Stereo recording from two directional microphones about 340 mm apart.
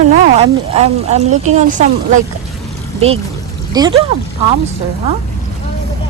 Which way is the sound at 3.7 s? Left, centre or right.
Centre.